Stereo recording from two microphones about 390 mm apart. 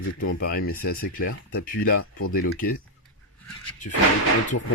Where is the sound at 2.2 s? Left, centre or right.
Left.